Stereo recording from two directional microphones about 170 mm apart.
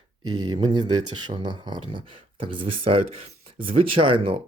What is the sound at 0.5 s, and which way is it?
Speech, 25° right (ahead or behind).